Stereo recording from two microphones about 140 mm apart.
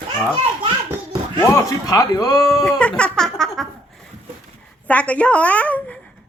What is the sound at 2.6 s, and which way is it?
Music, 10° left (ahead or behind).